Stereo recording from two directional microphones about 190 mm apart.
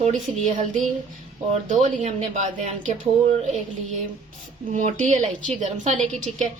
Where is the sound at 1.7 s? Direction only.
40° right (ahead or behind).